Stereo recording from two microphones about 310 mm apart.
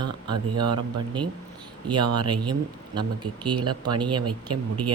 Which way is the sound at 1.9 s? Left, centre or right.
Centre.